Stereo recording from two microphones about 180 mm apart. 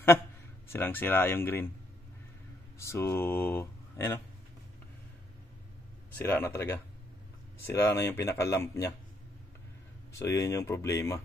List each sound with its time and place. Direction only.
0.7 s speech: 10° left (ahead or behind)
2.8 s speech: 15° left (ahead or behind)
6.1 s speech: 10° left (ahead or behind)
10.1 s speech: 15° left (ahead or behind)